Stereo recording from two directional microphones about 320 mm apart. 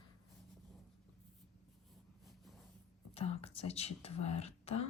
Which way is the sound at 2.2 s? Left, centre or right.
Centre.